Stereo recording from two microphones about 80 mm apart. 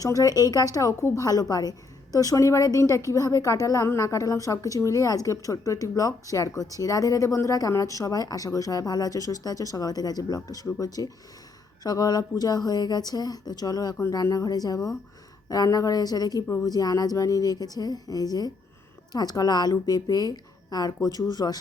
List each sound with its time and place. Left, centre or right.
0.0 s a woman's voice: left